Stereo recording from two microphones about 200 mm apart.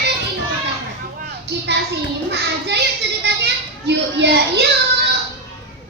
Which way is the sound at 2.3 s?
60° right (ahead or behind).